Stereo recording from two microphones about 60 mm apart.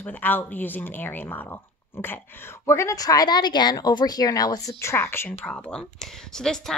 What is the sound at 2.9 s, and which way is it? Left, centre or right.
Speech, left.